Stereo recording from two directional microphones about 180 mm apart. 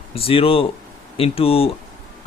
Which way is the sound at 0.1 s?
30° left (ahead or behind).